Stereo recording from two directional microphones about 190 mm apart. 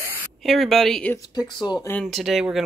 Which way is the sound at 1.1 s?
20° left (ahead or behind).